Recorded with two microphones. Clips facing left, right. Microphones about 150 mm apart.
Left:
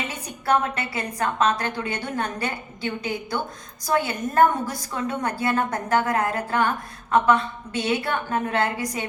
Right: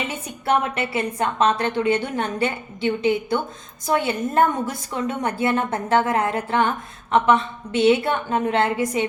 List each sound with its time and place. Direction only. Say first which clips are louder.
0.1 s a woman's voice: left 1 dB; 20° right (ahead or behind)